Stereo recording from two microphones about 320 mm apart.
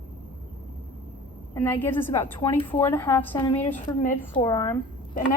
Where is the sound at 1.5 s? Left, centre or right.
Centre.